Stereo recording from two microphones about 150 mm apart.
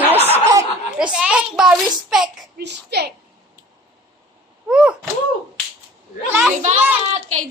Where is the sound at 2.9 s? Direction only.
90° right.